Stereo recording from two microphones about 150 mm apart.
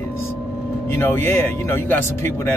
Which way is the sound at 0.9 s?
15° left (ahead or behind).